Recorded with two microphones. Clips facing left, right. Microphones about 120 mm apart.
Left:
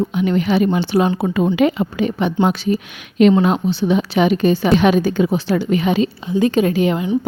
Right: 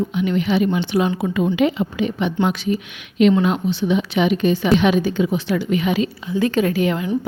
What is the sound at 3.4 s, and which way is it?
A woman's voice, 35° left (ahead or behind).